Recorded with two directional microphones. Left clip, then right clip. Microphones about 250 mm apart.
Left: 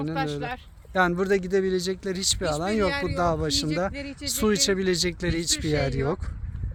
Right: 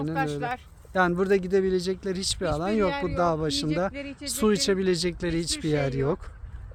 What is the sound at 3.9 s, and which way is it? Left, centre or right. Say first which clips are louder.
Speech: left 1 dB; left.